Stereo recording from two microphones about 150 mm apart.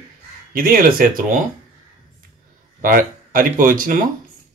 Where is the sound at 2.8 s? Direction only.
70° right (ahead or behind).